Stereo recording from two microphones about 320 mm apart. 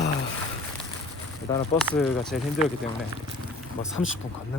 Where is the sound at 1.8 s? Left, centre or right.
Centre.